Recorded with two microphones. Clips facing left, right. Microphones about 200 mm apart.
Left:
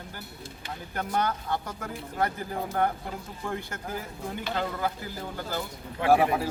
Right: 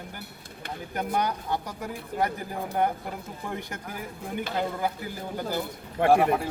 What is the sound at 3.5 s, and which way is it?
Speech, 15° right (ahead or behind).